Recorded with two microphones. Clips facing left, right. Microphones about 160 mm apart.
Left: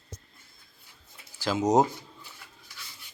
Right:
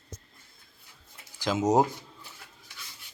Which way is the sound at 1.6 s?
15° left (ahead or behind).